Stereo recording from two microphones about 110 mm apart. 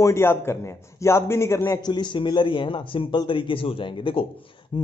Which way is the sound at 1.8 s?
40° left (ahead or behind).